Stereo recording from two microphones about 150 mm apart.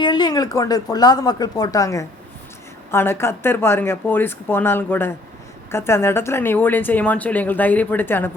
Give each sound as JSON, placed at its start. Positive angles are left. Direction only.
{"t": 0.0, "sound": "a woman's voice", "side_deg": 30}